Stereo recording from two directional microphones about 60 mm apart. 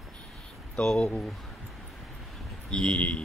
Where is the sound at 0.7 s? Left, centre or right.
Centre.